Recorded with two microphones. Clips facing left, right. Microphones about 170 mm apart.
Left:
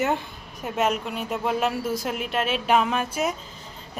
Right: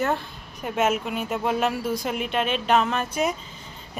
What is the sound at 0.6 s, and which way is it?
Speech, centre (ahead or behind).